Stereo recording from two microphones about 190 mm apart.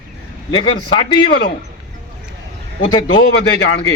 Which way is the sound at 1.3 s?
55° left (ahead or behind).